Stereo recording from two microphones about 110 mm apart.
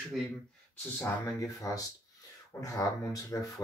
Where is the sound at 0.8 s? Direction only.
25° left (ahead or behind).